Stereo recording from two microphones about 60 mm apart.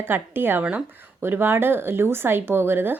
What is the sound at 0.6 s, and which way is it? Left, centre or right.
Speech, right.